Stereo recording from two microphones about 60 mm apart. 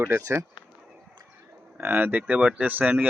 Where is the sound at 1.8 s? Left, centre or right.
Right.